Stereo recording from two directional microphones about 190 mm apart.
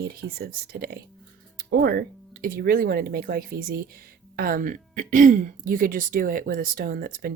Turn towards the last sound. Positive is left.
turn(degrees=-50)  # may be behind; listen again after turning